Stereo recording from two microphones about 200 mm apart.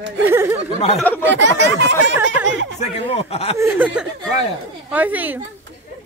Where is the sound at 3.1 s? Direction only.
30° left (ahead or behind).